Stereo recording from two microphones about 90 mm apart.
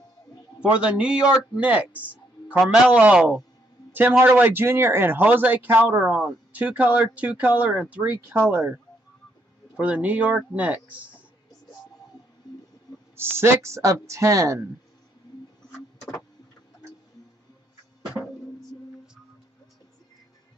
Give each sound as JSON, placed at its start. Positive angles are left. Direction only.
{"t": 0.6, "sound": "a man's voice", "side_deg": -10}
{"t": 13.1, "sound": "speech", "side_deg": -25}